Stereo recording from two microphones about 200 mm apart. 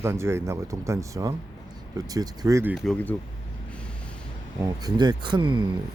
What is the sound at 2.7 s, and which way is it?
Speech, centre (ahead or behind).